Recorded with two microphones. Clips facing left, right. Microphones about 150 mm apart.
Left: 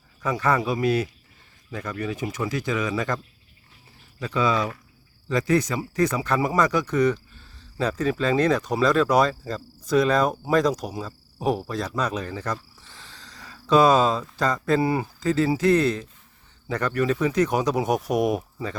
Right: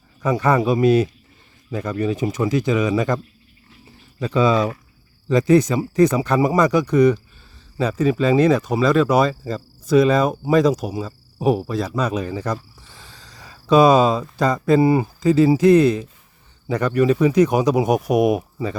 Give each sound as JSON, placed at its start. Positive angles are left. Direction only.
{"t": 0.2, "sound": "speech", "side_deg": -20}
{"t": 4.2, "sound": "speech", "side_deg": -25}